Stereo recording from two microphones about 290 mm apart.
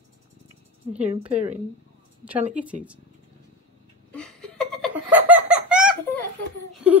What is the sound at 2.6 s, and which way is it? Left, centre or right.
Speech, centre.